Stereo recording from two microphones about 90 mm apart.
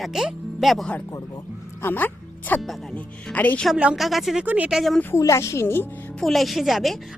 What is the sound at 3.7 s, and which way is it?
Speech, 10° right (ahead or behind).